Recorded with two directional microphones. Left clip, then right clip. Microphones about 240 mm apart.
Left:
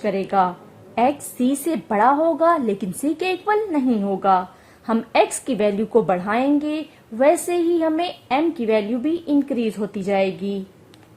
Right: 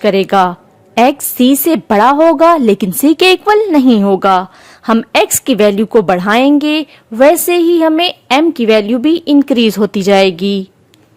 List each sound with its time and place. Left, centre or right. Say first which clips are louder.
0.0 s a woman's voice: right 10 dB; right